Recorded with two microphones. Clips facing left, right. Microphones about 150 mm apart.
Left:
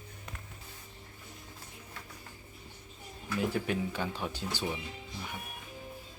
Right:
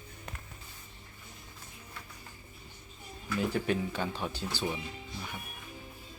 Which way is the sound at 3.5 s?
10° left (ahead or behind).